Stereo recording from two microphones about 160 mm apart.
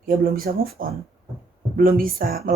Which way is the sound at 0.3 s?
70° right (ahead or behind).